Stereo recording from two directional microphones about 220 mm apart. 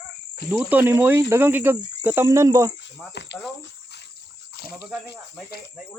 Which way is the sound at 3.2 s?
50° left (ahead or behind).